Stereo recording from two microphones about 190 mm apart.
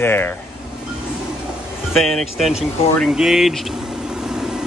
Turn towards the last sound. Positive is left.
turn(degrees=-5)  # may be behind; listen again after turning